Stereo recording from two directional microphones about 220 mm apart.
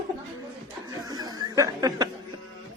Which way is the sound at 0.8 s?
15° right (ahead or behind).